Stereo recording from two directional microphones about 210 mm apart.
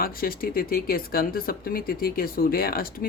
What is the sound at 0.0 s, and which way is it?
Speech, 45° left (ahead or behind).